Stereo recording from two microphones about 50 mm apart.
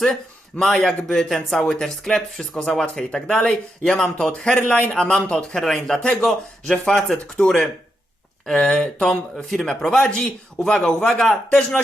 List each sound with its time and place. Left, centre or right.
0.6 s speech: centre
1.5 s speech: centre
4.9 s speech: centre
8.5 s speech: left
9.0 s speech: centre